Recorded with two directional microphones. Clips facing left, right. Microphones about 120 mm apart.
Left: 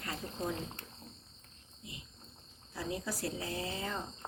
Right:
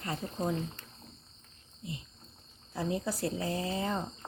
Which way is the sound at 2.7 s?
30° right (ahead or behind).